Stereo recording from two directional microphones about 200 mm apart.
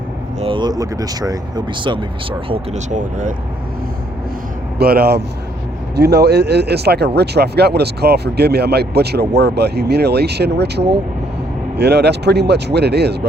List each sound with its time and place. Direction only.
0.3 s speech: 25° right (ahead or behind)
2.5 s speech: 35° right (ahead or behind)
4.8 s speech: 50° right (ahead or behind)